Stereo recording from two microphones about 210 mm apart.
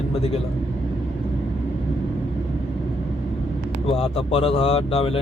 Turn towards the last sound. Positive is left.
turn(degrees=25)  # may be behind; listen again after turning